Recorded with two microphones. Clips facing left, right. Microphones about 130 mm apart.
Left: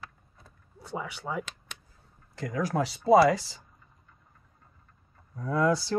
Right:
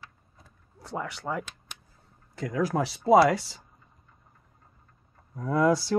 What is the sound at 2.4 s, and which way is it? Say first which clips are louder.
Speech: right 2 dB; 5° right (ahead or behind).